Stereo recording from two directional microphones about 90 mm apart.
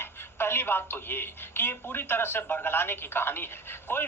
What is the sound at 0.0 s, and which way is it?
Speech, 25° left (ahead or behind).